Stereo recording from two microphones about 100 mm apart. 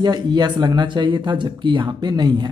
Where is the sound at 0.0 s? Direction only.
45° right (ahead or behind).